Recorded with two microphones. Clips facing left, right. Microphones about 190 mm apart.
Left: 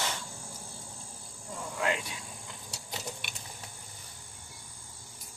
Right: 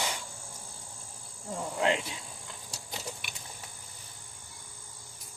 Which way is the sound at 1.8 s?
25° right (ahead or behind).